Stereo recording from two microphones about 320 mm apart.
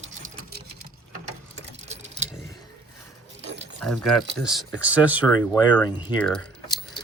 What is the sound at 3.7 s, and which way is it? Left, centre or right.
Speech, centre.